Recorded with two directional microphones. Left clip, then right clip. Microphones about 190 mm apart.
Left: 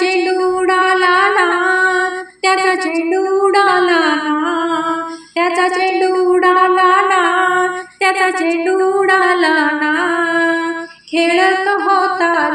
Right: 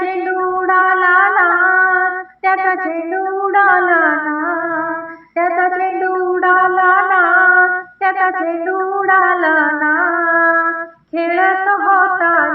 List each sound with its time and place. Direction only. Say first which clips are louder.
0.0 s music: left 3 dB; 40° left (ahead or behind)
3.5 s a sound: right 3 dB; 40° left (ahead or behind)
5.4 s singing: even; 40° left (ahead or behind)
11.2 s female singing: left 1 dB; 40° left (ahead or behind)